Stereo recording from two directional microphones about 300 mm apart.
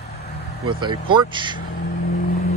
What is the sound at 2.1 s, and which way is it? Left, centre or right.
Vehicle, left.